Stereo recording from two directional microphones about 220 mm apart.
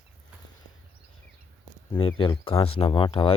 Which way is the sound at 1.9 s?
25° left (ahead or behind).